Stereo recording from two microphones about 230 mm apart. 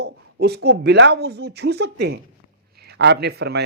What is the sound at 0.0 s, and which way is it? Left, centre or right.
Speech, right.